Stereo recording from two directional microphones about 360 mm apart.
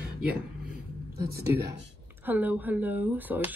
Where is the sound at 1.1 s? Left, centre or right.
Right.